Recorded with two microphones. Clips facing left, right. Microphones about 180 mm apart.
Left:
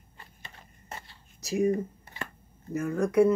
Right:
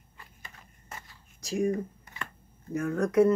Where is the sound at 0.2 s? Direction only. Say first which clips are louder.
Left 1 dB; 30° left (ahead or behind).